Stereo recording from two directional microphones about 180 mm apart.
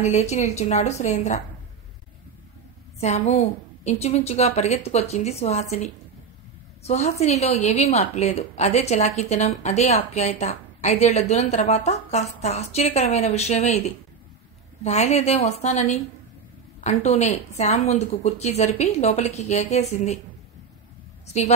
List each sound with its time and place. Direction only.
0.0 s a woman's voice: 40° left (ahead or behind)
3.0 s a woman's voice: 40° left (ahead or behind)